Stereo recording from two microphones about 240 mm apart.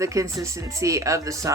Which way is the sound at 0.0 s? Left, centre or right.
Centre.